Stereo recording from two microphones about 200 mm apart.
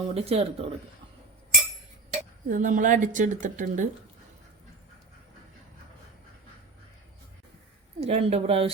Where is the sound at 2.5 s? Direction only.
40° right (ahead or behind).